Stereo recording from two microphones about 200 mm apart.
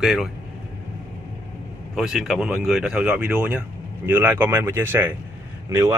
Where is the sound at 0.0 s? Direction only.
Centre (ahead or behind).